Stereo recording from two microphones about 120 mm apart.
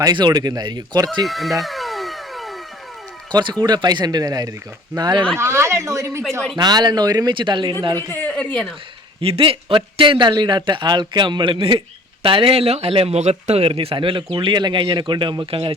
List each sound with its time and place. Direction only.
0.0 s a man's voice: 35° right (ahead or behind)
1.2 s music: centre (ahead or behind)
3.6 s a man's voice: 35° right (ahead or behind)
5.4 s a woman's voice: 20° right (ahead or behind); by 8.0 s 35° right (ahead or behind)
8.1 s a woman's voice: 15° left (ahead or behind)
9.2 s a man's voice: 50° right (ahead or behind)